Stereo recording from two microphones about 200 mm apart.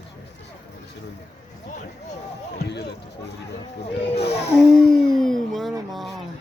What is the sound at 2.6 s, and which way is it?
Speech, 55° left (ahead or behind).